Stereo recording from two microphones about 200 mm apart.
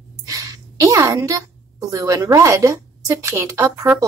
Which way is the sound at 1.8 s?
15° right (ahead or behind).